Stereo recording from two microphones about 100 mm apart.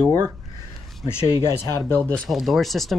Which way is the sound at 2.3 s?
Centre (ahead or behind).